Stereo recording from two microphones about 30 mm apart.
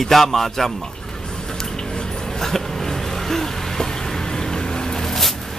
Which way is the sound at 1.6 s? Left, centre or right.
Left.